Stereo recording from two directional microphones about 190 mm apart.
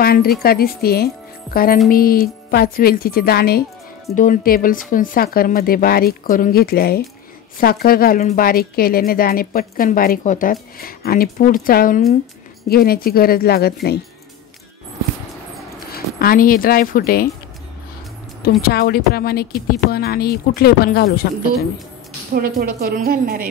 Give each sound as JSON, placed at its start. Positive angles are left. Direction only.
{"t": 0.0, "sound": "a woman's voice", "side_deg": 50}
{"t": 4.1, "sound": "a woman's voice", "side_deg": 45}
{"t": 15.9, "sound": "speech", "side_deg": 50}
{"t": 18.6, "sound": "speech", "side_deg": 55}
{"t": 22.3, "sound": "a woman's voice", "side_deg": -50}